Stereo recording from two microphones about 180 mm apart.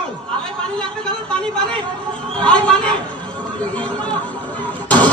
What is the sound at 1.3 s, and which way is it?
Speech, 5° left (ahead or behind).